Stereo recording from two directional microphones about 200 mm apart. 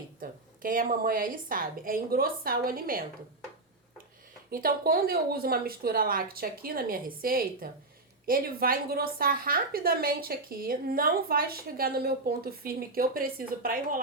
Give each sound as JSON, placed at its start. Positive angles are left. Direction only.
{"t": 0.2, "sound": "a woman's voice", "side_deg": -45}
{"t": 4.5, "sound": "a woman's voice", "side_deg": -45}